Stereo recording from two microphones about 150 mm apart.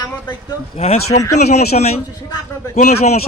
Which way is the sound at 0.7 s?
45° left (ahead or behind).